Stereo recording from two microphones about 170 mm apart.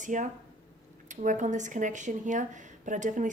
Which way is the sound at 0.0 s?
45° right (ahead or behind).